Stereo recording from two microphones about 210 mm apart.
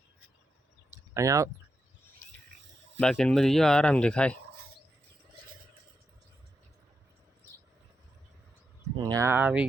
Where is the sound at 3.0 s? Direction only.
5° left (ahead or behind).